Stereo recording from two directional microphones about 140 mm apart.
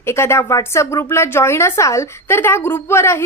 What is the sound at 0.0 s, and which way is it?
Speech, 20° left (ahead or behind).